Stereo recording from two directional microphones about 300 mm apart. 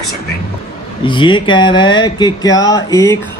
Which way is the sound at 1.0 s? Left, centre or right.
Centre.